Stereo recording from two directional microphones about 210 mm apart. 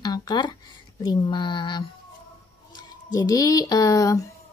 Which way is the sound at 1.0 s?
20° left (ahead or behind).